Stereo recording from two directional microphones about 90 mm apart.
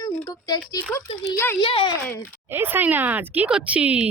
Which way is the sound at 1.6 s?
70° left (ahead or behind).